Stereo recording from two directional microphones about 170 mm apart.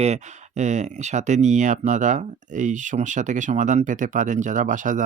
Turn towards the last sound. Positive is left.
turn(degrees=-50)  # may be behind; listen again after turning